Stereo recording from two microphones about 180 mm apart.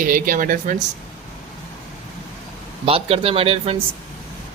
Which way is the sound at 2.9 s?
30° right (ahead or behind).